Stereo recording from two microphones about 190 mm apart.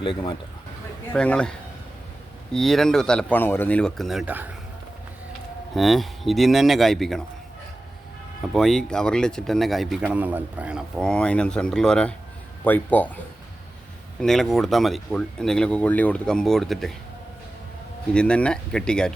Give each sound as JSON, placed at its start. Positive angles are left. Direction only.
{"t": 0.0, "sound": "speech", "side_deg": 25}
{"t": 1.1, "sound": "speech", "side_deg": 5}
{"t": 5.7, "sound": "speech", "side_deg": 0}
{"t": 8.4, "sound": "speech", "side_deg": 0}
{"t": 14.2, "sound": "speech", "side_deg": 0}
{"t": 18.1, "sound": "speech", "side_deg": 5}